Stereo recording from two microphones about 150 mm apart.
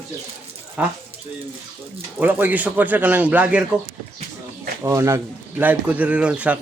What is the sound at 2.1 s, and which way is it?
A man's voice, 10° right (ahead or behind).